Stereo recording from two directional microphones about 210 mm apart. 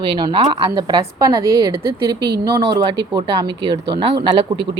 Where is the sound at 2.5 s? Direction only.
20° right (ahead or behind).